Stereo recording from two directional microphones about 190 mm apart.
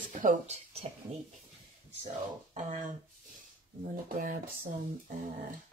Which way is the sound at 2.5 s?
40° right (ahead or behind).